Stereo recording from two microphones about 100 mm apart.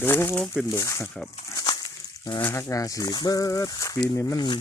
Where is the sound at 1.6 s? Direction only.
40° left (ahead or behind).